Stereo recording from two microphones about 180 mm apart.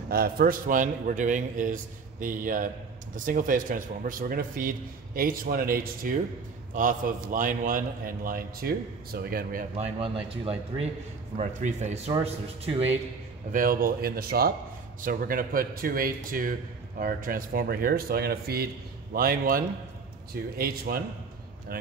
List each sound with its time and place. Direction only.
0.1 s a man's voice: 55° right (ahead or behind)
9.8 s speech: 30° right (ahead or behind)
13.5 s a man's voice: 50° right (ahead or behind)